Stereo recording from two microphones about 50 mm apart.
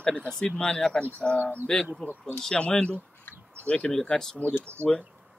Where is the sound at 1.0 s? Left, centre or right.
Left.